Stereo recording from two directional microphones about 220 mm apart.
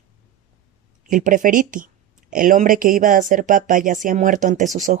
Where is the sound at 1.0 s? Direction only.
35° right (ahead or behind).